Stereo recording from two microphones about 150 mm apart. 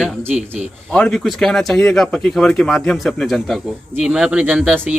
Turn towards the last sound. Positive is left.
turn(degrees=-10)  # may be behind; listen again after turning